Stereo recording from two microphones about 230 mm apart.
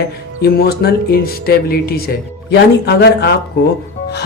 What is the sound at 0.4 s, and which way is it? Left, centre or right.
Speech, left.